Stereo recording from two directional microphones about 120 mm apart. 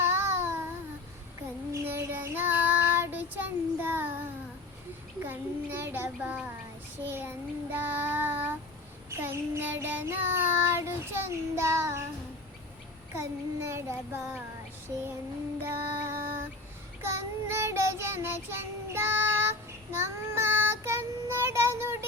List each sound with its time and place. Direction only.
0.0 s a sound: 20° right (ahead or behind)
1.4 s child singing: 25° right (ahead or behind)
5.2 s a sound: 20° right (ahead or behind)
7.0 s child singing: 20° right (ahead or behind)
13.1 s child singing: 20° right (ahead or behind)
15.6 s music: 20° right (ahead or behind)
17.0 s child singing: 20° right (ahead or behind)